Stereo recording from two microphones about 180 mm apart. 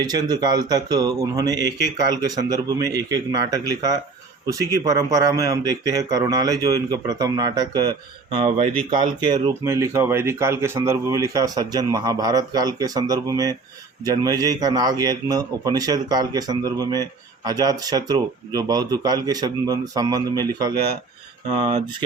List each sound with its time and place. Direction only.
0.0 s speech: 20° right (ahead or behind)
8.4 s speech: 35° right (ahead or behind); by 20.7 s 20° right (ahead or behind)
21.6 s speech: 40° right (ahead or behind)